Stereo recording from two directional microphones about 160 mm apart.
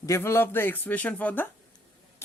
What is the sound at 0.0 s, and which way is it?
Speech, 15° left (ahead or behind).